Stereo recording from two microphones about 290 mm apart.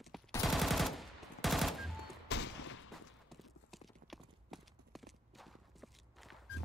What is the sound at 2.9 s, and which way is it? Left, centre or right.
Clip-clop, centre.